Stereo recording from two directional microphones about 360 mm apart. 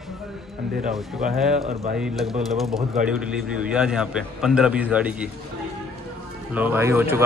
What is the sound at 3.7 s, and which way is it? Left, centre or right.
A man's voice, centre.